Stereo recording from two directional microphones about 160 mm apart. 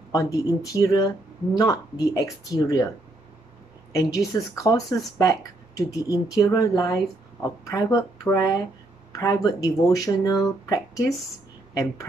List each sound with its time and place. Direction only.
0.1 s speech: 20° left (ahead or behind)
3.9 s speech: 20° left (ahead or behind)